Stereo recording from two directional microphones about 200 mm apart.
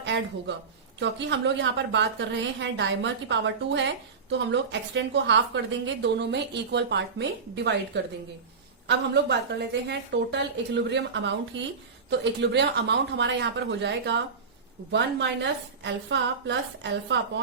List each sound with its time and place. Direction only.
0.0 s a woman's voice: 60° right (ahead or behind)